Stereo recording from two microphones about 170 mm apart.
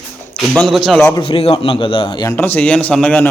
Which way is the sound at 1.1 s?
30° left (ahead or behind).